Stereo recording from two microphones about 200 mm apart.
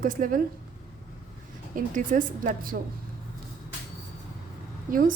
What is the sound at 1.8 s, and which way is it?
A woman's voice, 40° right (ahead or behind).